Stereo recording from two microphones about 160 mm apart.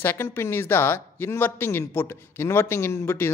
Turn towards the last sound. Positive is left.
turn(degrees=15)  # may be behind; listen again after turning